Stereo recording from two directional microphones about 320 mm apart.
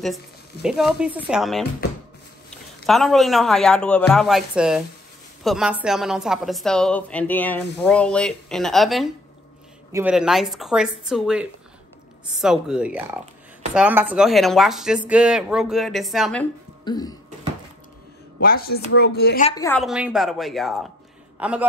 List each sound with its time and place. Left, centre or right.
0.0 s a woman's voice: centre
2.9 s a woman's voice: centre
16.8 s music: centre
18.4 s speech: left
19.5 s a woman's voice: centre